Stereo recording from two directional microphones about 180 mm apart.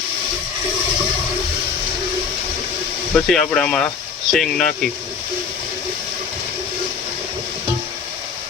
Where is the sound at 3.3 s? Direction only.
5° left (ahead or behind).